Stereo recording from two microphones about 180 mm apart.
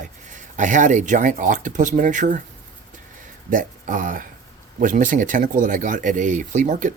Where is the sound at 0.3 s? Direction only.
45° right (ahead or behind).